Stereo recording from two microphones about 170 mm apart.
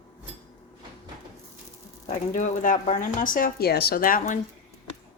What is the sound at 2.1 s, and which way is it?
Speech, 50° left (ahead or behind).